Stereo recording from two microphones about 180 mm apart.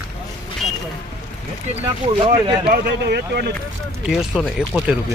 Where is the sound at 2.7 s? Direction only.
65° right (ahead or behind).